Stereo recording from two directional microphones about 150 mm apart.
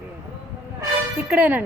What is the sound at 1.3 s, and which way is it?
Speech, 10° right (ahead or behind).